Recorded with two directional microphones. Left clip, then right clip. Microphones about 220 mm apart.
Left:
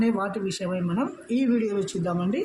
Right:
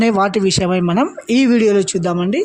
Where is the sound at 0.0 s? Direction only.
40° right (ahead or behind).